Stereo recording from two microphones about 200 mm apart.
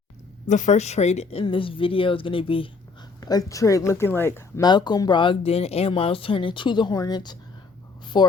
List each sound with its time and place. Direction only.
0.4 s speech: 35° left (ahead or behind); by 8.3 s 20° left (ahead or behind)